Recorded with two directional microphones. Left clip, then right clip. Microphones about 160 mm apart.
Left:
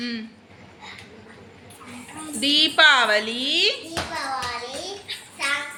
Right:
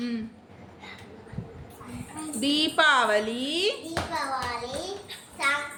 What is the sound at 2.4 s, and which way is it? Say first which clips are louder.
A woman's voice: left 6 dB; 10° right (ahead or behind).